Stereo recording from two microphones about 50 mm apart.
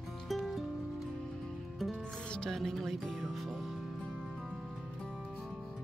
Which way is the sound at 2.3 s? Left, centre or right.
Centre.